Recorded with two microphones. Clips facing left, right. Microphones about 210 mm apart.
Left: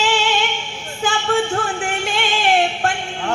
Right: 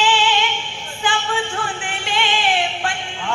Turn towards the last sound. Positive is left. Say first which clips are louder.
# left 4 dB
turn(degrees=45)  # may be behind; listen again after turning